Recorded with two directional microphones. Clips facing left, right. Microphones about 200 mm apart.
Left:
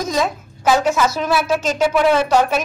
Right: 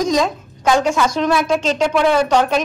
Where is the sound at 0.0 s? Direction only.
5° left (ahead or behind).